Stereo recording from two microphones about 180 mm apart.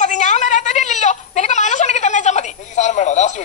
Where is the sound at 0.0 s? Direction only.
45° left (ahead or behind).